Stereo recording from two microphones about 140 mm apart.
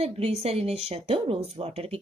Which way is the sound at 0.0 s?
45° right (ahead or behind).